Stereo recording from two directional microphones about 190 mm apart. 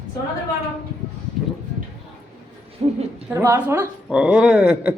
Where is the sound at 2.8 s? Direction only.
35° right (ahead or behind).